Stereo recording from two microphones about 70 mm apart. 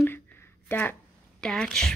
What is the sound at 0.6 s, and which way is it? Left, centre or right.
Speech, left.